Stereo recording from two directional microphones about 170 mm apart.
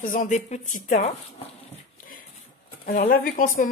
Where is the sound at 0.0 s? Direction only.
50° left (ahead or behind).